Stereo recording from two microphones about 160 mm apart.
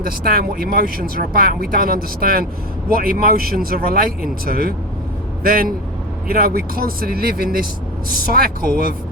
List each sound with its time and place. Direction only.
0.0 s a man's voice: 70° right (ahead or behind)